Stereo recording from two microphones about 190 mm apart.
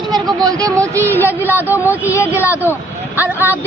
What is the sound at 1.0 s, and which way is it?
A woman's voice, 10° left (ahead or behind).